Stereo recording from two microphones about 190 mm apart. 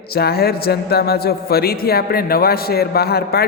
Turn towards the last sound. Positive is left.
turn(degrees=55)  # may be behind; listen again after turning